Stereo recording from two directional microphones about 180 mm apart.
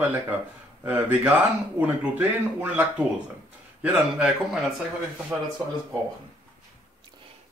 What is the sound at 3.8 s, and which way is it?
Speech, 5° right (ahead or behind).